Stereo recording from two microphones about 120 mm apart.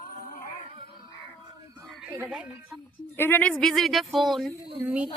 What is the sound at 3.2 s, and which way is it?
Speech, 15° left (ahead or behind).